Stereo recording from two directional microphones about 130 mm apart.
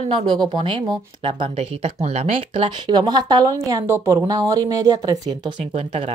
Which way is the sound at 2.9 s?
30° right (ahead or behind).